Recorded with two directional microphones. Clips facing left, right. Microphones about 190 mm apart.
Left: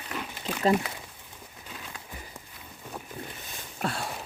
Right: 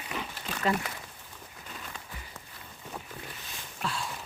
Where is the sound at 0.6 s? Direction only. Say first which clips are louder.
Left 5 dB; 35° left (ahead or behind).